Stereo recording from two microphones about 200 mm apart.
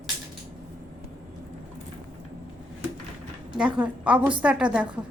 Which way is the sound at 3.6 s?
5° right (ahead or behind).